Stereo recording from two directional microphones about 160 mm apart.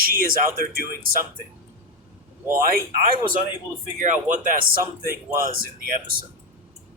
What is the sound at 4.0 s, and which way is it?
Speech, 50° right (ahead or behind).